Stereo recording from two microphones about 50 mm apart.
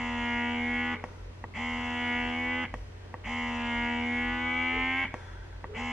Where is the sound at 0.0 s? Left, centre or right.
Centre.